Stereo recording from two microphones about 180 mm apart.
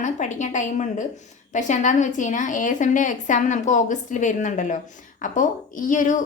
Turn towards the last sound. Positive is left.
turn(degrees=45)  # may be behind; listen again after turning